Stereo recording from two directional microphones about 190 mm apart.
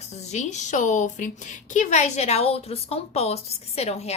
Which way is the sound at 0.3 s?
40° left (ahead or behind).